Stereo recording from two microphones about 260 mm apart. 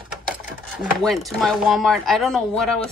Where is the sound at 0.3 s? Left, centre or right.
Centre.